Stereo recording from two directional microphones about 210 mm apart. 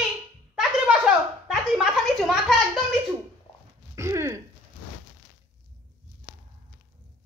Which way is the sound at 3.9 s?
15° right (ahead or behind).